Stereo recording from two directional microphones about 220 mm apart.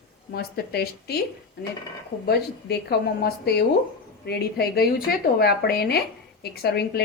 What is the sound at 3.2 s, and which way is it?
Speech, 45° left (ahead or behind).